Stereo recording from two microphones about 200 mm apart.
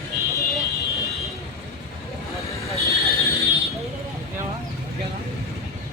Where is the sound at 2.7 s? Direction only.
15° left (ahead or behind).